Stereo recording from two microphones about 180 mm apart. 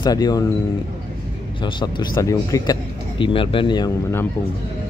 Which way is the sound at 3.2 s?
30° left (ahead or behind).